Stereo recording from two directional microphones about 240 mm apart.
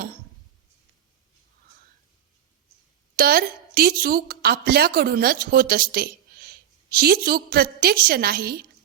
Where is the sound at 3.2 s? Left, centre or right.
Right.